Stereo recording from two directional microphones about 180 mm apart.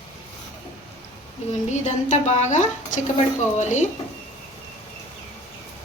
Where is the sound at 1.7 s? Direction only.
40° left (ahead or behind).